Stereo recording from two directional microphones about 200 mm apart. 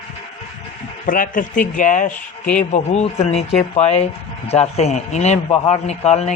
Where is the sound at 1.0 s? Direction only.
45° left (ahead or behind).